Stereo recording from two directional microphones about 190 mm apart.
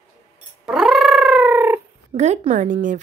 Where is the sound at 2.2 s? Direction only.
40° right (ahead or behind).